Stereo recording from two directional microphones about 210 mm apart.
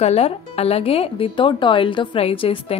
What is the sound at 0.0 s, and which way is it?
A woman's voice, 30° left (ahead or behind).